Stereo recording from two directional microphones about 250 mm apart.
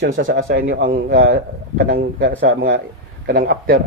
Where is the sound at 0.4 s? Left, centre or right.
Right.